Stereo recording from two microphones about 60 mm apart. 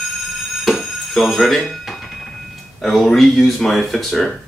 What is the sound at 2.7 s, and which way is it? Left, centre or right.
Speech, centre.